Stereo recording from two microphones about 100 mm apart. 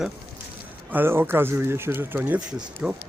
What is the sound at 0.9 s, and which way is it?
Speech, 20° right (ahead or behind).